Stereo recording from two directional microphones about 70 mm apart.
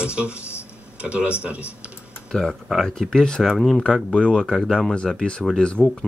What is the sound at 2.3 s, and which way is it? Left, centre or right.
Speech, centre.